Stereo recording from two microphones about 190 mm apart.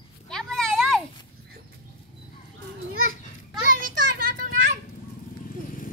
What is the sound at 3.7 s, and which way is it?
Children playing, 45° right (ahead or behind).